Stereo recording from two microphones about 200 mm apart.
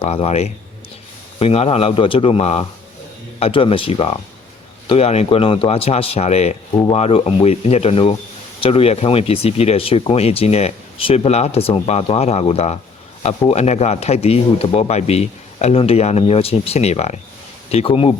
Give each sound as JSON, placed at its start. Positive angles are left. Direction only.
{"t": 0.0, "sound": "a man's voice", "side_deg": 30}